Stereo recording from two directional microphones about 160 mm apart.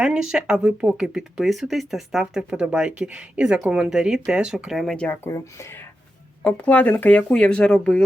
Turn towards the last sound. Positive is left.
turn(degrees=5)  # may be behind; listen again after turning